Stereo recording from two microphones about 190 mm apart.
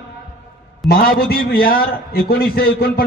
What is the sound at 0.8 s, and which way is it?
A man's voice, 55° left (ahead or behind).